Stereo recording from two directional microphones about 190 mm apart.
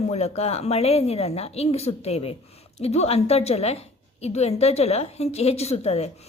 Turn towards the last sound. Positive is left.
turn(degrees=35)  # may be behind; listen again after turning